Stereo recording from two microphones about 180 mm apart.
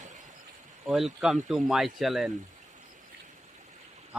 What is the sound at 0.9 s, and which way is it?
Speech, centre (ahead or behind).